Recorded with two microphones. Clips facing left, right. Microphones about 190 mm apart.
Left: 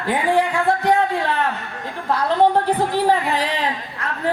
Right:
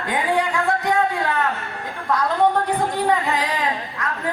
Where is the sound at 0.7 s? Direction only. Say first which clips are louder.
Left 3 dB; 30° left (ahead or behind).